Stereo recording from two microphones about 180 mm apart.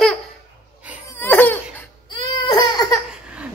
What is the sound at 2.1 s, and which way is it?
Crying, 25° left (ahead or behind).